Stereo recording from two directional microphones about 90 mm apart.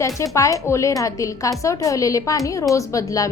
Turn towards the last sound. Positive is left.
turn(degrees=40)  # may be behind; listen again after turning